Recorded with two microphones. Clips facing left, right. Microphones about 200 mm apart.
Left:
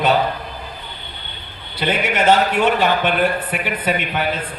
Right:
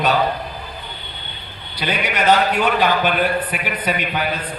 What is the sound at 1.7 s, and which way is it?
A man's voice, 25° left (ahead or behind).